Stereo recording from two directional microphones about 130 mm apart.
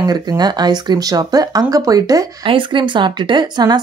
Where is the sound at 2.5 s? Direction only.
35° right (ahead or behind).